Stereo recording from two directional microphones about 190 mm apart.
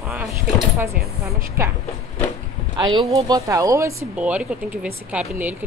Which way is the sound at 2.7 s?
25° right (ahead or behind).